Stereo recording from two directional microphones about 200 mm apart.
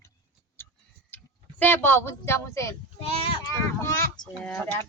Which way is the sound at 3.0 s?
30° left (ahead or behind).